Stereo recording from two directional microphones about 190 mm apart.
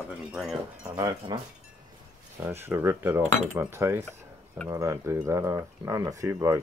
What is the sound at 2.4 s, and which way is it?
Speech, 10° right (ahead or behind).